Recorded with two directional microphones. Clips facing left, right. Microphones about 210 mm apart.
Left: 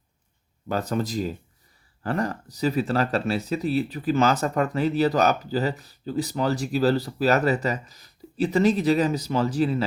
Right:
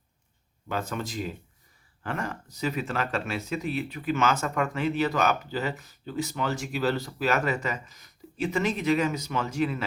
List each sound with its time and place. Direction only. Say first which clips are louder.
0.7 s speech: left 6 dB; 40° left (ahead or behind)